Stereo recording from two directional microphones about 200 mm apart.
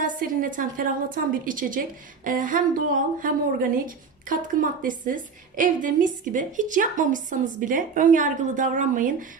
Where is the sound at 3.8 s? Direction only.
40° right (ahead or behind).